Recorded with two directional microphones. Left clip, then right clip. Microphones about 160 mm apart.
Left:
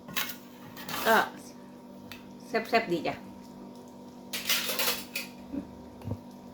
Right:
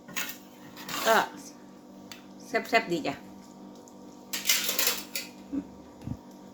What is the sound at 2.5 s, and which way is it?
Speech, 20° right (ahead or behind).